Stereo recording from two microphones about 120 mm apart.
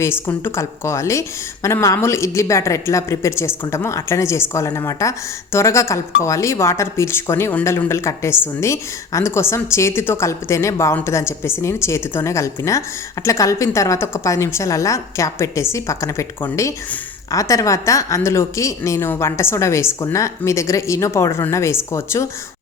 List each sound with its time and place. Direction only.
0.3 s a woman's voice: 20° left (ahead or behind)